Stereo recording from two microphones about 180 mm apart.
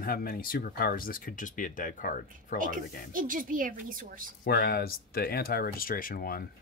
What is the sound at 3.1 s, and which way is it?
Speech, 50° right (ahead or behind).